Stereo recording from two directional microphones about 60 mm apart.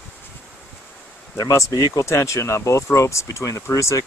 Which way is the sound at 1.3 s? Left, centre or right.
Left.